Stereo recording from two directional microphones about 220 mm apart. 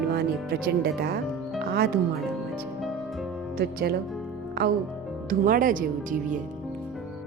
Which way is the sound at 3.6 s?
45° right (ahead or behind).